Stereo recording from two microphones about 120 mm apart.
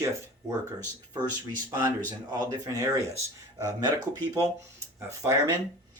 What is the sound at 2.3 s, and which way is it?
Speech, 30° right (ahead or behind).